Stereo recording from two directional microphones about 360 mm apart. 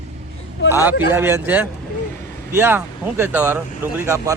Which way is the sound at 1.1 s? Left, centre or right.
Centre.